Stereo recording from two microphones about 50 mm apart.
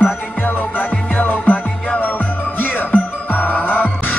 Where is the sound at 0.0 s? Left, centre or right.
Left.